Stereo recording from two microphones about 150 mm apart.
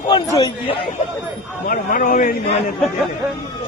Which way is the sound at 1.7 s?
65° left (ahead or behind).